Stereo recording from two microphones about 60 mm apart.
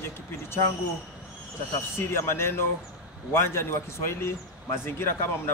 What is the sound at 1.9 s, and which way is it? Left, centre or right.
A man's voice, left.